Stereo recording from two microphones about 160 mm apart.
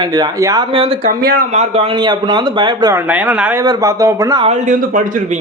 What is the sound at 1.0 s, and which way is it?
Speech, 70° right (ahead or behind).